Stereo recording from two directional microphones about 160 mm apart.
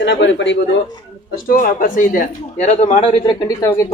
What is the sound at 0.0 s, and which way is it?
Speech, 90° left.